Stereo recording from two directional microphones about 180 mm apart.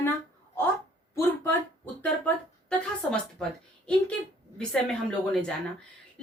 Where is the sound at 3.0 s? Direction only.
5° left (ahead or behind).